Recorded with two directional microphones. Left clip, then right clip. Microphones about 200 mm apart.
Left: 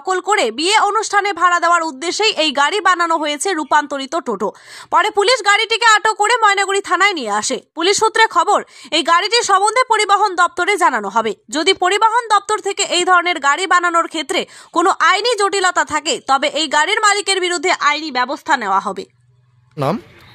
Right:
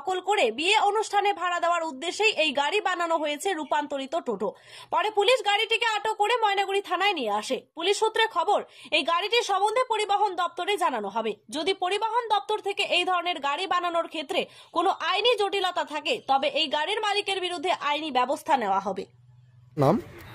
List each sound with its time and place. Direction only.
0.3 s a woman's voice: 30° left (ahead or behind)
18.5 s speech: 25° left (ahead or behind)